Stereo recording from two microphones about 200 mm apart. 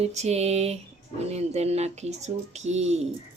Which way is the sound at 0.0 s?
35° right (ahead or behind).